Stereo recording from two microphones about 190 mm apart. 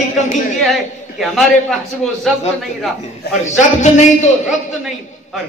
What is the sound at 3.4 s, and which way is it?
Speech, 40° left (ahead or behind).